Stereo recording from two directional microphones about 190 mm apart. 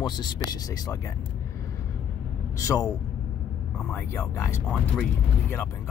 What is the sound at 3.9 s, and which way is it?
Speech, 10° left (ahead or behind).